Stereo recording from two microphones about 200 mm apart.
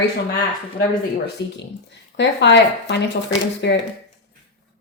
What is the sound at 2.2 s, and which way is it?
A woman's voice, 60° left (ahead or behind).